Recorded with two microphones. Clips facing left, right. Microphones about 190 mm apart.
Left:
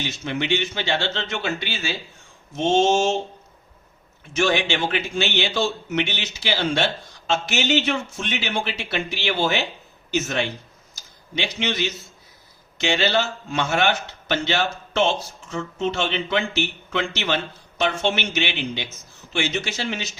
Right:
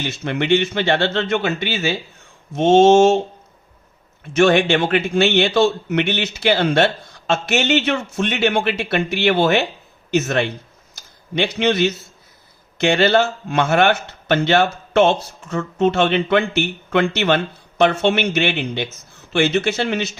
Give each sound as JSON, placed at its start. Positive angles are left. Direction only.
{"t": 0.0, "sound": "speech", "side_deg": -55}
{"t": 4.4, "sound": "speech", "side_deg": -60}